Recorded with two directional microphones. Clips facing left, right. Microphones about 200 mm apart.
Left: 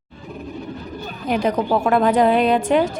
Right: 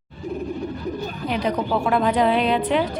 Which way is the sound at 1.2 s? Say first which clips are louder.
Left 4 dB; 50° left (ahead or behind).